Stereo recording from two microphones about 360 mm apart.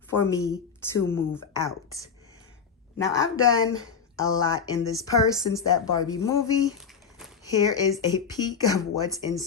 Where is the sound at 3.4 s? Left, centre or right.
Left.